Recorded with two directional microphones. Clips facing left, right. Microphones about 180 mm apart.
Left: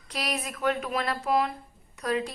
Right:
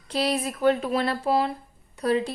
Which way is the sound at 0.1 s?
30° right (ahead or behind).